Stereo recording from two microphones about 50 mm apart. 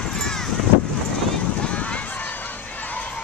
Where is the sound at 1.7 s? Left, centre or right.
Left.